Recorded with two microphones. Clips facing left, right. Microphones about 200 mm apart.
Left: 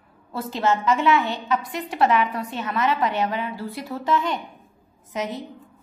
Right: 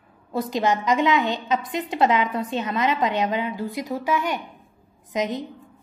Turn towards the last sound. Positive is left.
turn(degrees=-20)  # may be behind; listen again after turning